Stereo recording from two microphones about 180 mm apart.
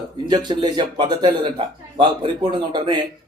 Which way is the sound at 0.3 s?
25° right (ahead or behind).